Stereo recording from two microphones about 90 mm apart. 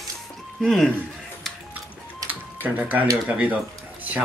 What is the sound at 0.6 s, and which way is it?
Speech, 5° left (ahead or behind).